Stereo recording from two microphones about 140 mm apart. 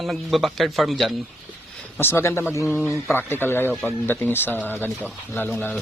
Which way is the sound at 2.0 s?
15° left (ahead or behind).